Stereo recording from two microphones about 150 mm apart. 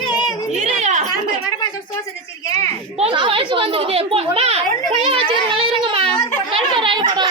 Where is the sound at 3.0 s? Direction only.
35° right (ahead or behind).